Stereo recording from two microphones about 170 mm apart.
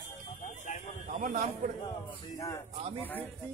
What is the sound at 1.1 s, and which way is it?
Speech, 50° right (ahead or behind).